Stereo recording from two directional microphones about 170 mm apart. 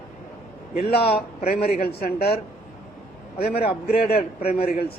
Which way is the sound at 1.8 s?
65° left (ahead or behind).